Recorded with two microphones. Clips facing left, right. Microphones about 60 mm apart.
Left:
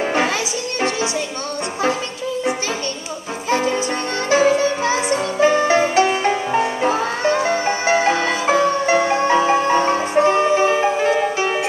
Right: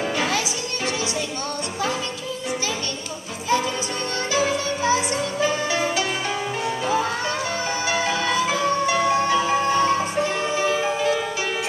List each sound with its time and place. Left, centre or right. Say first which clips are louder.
0.0 s music: left 5 dB; left
3.4 s music: left 4 dB; left